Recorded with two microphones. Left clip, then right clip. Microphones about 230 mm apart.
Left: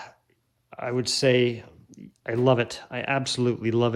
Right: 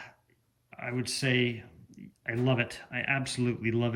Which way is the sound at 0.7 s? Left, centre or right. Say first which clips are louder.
Left 8 dB; centre.